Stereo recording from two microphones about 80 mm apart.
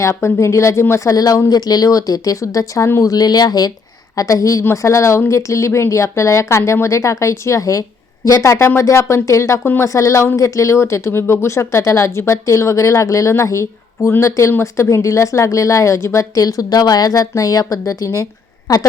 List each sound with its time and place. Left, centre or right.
0.0 s a woman's voice: left
3.1 s speech: left
4.1 s a woman's voice: left